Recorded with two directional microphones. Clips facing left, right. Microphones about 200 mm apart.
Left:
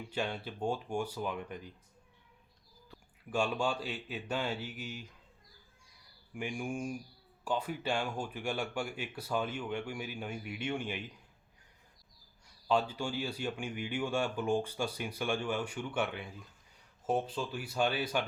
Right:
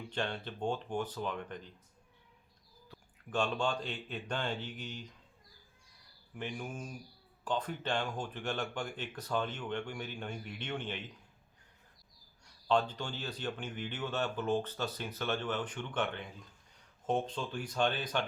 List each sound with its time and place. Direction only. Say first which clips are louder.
0.1 s speech: left 1 dB; 10° left (ahead or behind)
2.9 s speech: left 1 dB; 10° left (ahead or behind)
6.3 s speech: left 4 dB; 10° left (ahead or behind)
12.6 s speech: even; 10° left (ahead or behind)